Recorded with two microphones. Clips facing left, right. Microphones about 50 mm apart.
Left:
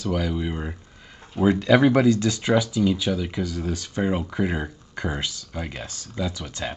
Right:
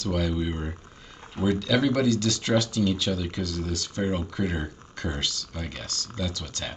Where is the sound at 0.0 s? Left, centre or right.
Centre.